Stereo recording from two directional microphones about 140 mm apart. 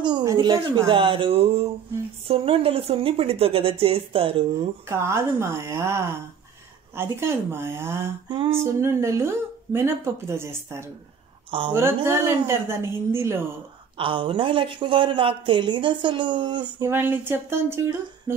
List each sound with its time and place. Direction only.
0.0 s a sound: 30° right (ahead or behind)
0.3 s a woman's voice: 35° right (ahead or behind)
4.8 s a woman's voice: 20° right (ahead or behind)
13.9 s speech: 40° right (ahead or behind)
16.8 s a woman's voice: 15° right (ahead or behind)